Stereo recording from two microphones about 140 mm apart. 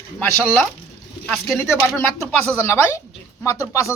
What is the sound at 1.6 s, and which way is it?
Speech, 10° left (ahead or behind).